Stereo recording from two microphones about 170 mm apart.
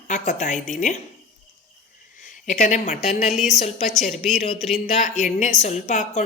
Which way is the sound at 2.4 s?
45° left (ahead or behind).